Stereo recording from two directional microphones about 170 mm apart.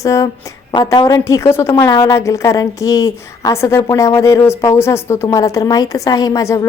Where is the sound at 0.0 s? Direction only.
20° left (ahead or behind).